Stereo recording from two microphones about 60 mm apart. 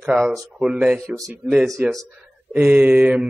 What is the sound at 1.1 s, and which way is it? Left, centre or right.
Speech, right.